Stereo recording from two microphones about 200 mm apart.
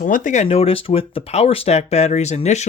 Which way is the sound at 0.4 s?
30° left (ahead or behind).